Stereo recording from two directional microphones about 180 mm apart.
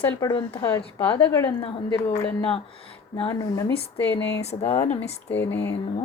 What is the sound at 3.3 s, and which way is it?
Speech, 20° left (ahead or behind).